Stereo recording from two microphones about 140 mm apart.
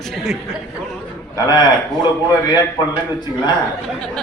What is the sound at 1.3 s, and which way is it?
A man's voice, 25° left (ahead or behind).